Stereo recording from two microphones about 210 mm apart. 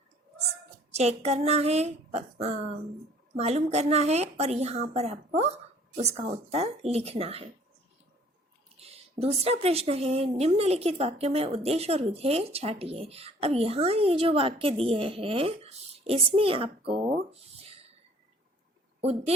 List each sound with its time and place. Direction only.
0.9 s a woman's voice: 30° right (ahead or behind)
8.8 s a woman's voice: 30° right (ahead or behind)